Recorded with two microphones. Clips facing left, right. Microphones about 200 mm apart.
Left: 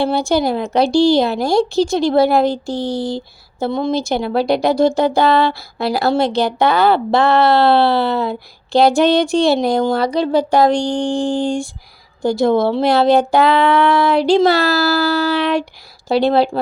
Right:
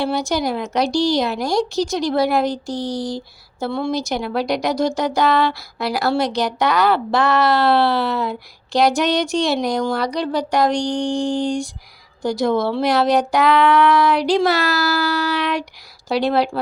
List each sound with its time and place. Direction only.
0.0 s speech: 30° left (ahead or behind)